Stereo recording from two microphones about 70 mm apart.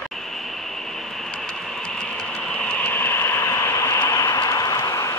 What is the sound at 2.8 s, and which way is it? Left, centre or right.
Train, left.